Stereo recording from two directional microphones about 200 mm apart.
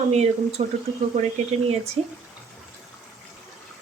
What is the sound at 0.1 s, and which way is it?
Speech, 30° right (ahead or behind).